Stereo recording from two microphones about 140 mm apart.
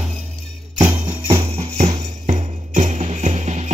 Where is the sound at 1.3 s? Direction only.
45° right (ahead or behind).